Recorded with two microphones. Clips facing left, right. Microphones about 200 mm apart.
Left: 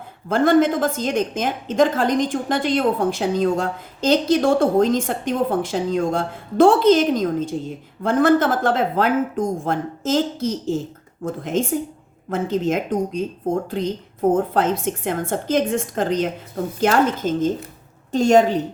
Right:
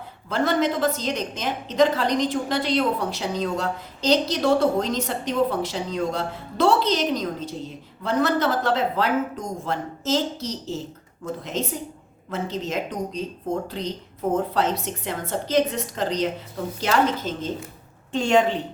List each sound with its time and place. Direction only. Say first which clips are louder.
0.3 s a woman's voice: left 6 dB; 50° left (ahead or behind)